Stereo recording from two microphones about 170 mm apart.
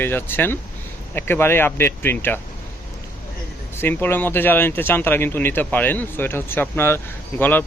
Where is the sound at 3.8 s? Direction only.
15° left (ahead or behind).